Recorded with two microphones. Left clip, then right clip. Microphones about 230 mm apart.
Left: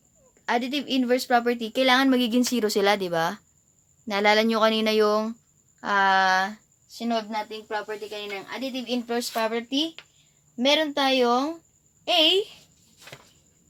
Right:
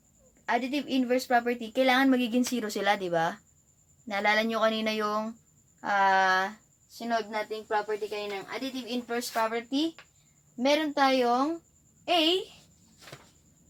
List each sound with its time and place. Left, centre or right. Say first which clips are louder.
0.4 s speech: left 3 dB; left
9.0 s speech: left 1 dB; left